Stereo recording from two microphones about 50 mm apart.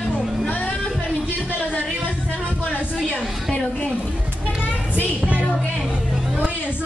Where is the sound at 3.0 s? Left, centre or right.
Left.